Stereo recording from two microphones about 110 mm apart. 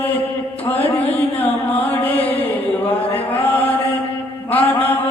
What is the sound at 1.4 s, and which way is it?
Mantra, 15° left (ahead or behind).